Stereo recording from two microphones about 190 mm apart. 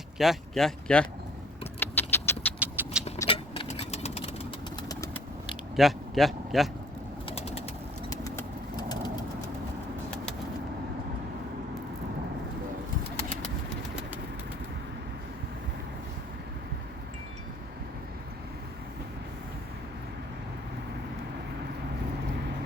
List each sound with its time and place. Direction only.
0.2 s speech: centre (ahead or behind)
1.8 s vehicle: 10° left (ahead or behind)
2.6 s vehicle: 10° right (ahead or behind)
3.2 s vehicle: 30° left (ahead or behind)
5.7 s speech: centre (ahead or behind)
7.3 s bird: 30° left (ahead or behind)
8.1 s vehicle: 20° left (ahead or behind)